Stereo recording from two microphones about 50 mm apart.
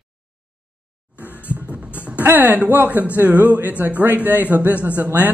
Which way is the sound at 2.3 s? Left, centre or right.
Right.